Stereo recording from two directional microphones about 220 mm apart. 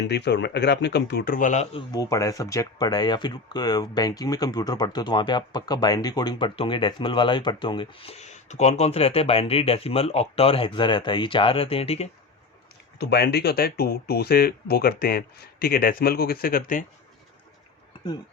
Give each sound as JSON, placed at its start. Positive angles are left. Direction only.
{"t": 0.0, "sound": "speech", "side_deg": 50}
{"t": 1.9, "sound": "speech", "side_deg": 15}
{"t": 13.0, "sound": "speech", "side_deg": 50}